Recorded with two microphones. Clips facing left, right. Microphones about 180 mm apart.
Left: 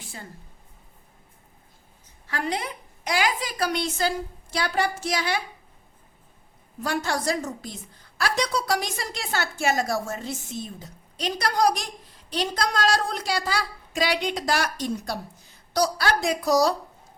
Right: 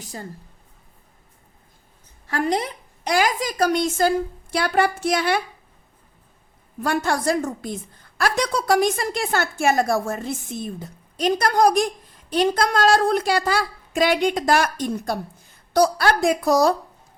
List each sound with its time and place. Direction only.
0.0 s speech: 40° right (ahead or behind)
2.3 s a woman's voice: 40° right (ahead or behind)
6.8 s a woman's voice: 55° right (ahead or behind)